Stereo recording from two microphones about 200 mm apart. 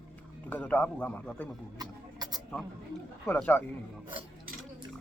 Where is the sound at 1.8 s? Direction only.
20° right (ahead or behind).